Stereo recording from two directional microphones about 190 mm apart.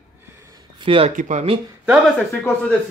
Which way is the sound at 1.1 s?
40° right (ahead or behind).